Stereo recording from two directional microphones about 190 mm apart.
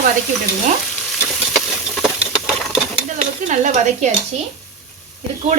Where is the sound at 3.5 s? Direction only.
40° right (ahead or behind).